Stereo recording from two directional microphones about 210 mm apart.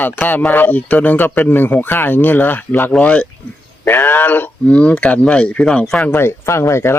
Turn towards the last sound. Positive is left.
turn(degrees=10)  # may be behind; listen again after turning